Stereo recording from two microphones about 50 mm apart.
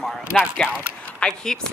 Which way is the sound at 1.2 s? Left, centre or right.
Centre.